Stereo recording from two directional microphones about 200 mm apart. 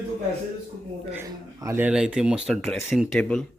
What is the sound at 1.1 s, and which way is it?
Speech, 15° right (ahead or behind).